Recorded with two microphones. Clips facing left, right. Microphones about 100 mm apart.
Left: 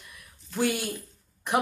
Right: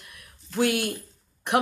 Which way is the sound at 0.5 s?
65° right (ahead or behind).